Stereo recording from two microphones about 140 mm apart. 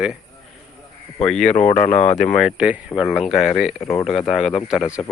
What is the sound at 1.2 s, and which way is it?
Speech, 5° left (ahead or behind).